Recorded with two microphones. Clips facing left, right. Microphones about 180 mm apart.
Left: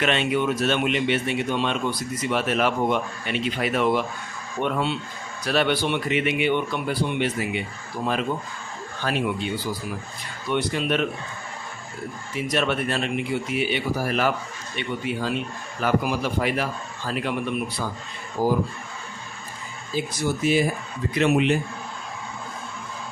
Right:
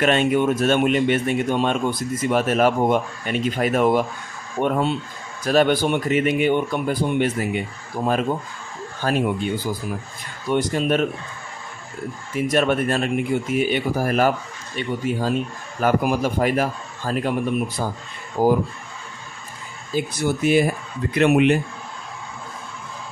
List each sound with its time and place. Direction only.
0.0 s speech: 45° right (ahead or behind)
12.4 s speech: 45° right (ahead or behind)
18.4 s speech: 55° right (ahead or behind)
20.2 s speech: 55° right (ahead or behind)